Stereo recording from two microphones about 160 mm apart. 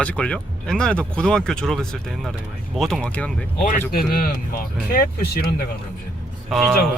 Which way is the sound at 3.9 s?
65° left (ahead or behind).